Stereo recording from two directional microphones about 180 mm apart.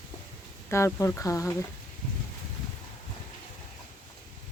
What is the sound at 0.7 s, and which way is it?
Speech, 15° left (ahead or behind).